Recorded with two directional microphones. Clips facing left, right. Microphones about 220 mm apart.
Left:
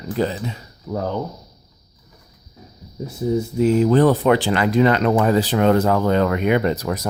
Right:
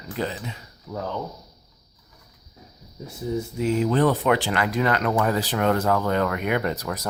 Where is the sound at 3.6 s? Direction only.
40° left (ahead or behind).